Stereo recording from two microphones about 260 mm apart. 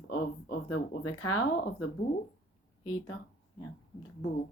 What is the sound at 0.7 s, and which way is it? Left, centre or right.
Speech, left.